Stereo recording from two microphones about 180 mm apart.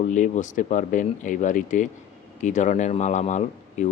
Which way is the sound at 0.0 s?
40° left (ahead or behind).